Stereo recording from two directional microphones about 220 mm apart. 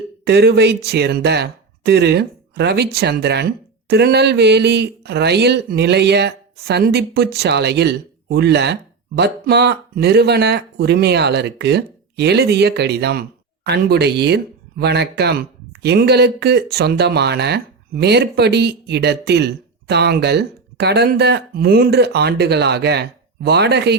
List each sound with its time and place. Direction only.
0.3 s speech: 50° right (ahead or behind)